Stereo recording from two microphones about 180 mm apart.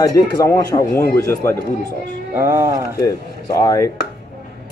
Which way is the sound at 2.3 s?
15° right (ahead or behind).